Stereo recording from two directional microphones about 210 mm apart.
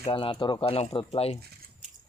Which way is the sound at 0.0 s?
25° left (ahead or behind).